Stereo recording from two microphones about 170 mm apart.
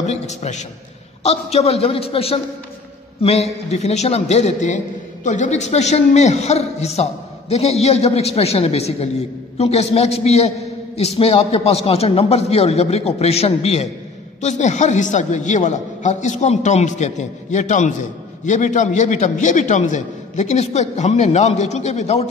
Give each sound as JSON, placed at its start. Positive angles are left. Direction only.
{"t": 0.0, "sound": "a man's voice", "side_deg": 40}